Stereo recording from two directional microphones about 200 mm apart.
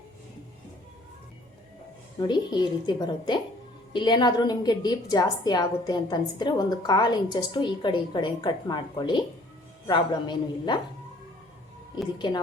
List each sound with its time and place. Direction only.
2.1 s a woman's voice: 20° left (ahead or behind)